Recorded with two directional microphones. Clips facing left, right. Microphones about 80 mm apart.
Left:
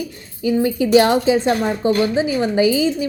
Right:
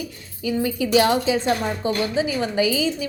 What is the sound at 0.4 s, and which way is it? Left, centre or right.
A woman's voice, left.